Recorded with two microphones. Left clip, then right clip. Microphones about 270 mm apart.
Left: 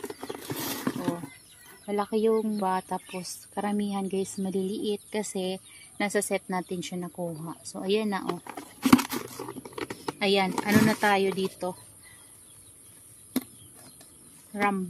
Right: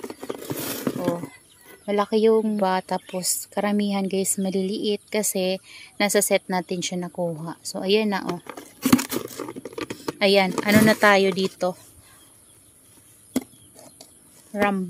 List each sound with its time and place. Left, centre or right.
0.2 s a sound: centre
1.9 s a woman's voice: right
8.5 s crumpling: right
9.6 s a sound: centre
10.1 s a woman's voice: right
14.5 s speech: right